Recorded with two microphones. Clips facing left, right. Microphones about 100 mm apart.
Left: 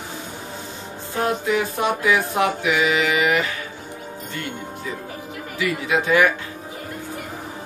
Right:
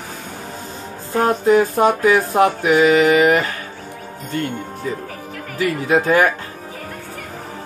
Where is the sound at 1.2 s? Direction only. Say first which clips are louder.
Right 7 dB; 40° right (ahead or behind).